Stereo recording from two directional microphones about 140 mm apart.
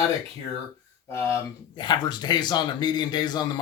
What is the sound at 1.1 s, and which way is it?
Speech, 20° left (ahead or behind).